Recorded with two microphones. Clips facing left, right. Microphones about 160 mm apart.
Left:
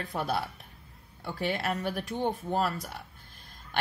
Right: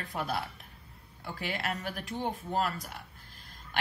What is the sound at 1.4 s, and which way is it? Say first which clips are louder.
Speech: left 5 dB; 40° left (ahead or behind).